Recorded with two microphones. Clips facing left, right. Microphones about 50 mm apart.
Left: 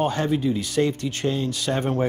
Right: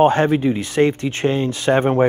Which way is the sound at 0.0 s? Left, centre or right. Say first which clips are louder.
Right 8 dB; right.